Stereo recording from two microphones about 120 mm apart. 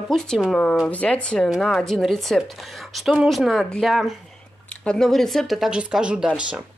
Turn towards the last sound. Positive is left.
turn(degrees=-10)  # may be behind; listen again after turning